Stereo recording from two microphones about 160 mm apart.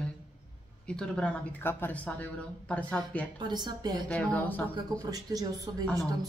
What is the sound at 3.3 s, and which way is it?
Speech, 25° right (ahead or behind).